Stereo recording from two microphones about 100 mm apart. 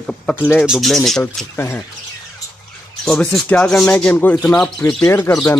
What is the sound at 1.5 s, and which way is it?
Speech, 20° left (ahead or behind).